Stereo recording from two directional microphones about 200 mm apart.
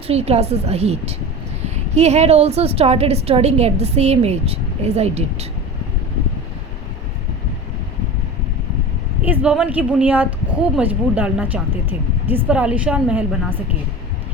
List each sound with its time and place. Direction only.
0.1 s a woman's voice: 30° right (ahead or behind)
9.2 s speech: 5° right (ahead or behind)